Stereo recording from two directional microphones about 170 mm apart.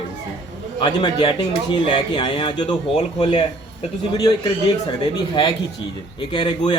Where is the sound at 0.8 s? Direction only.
25° left (ahead or behind).